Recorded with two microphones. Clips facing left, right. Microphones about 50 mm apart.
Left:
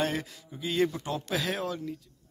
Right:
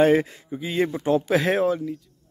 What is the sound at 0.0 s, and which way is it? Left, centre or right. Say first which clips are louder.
A man's voice: right 13 dB; right.